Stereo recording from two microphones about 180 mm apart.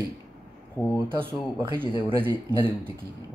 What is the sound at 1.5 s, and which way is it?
Speech, 15° right (ahead or behind).